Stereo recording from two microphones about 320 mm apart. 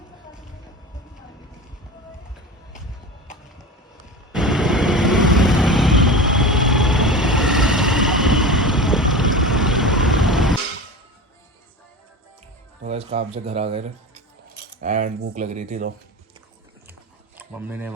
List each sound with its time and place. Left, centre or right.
4.3 s vehicle: centre
12.8 s speech: centre
17.3 s speech: centre